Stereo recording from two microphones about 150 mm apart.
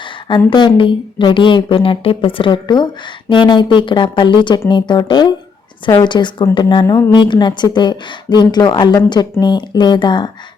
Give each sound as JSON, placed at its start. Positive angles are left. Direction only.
{"t": 0.3, "sound": "a woman's voice", "side_deg": 30}